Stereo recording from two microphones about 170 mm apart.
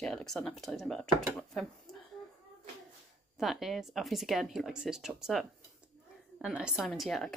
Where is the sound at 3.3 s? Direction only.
Centre (ahead or behind).